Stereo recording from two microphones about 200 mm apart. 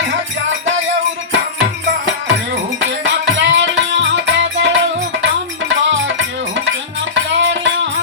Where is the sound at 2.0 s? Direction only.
65° right (ahead or behind).